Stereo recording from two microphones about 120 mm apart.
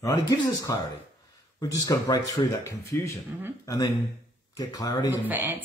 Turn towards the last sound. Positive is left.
turn(degrees=-15)  # may be behind; listen again after turning